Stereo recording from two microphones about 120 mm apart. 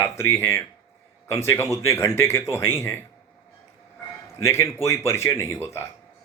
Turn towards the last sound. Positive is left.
turn(degrees=25)  # may be behind; listen again after turning